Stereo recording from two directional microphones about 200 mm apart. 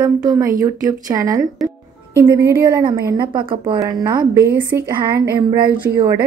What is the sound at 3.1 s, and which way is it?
A woman's voice, 25° right (ahead or behind).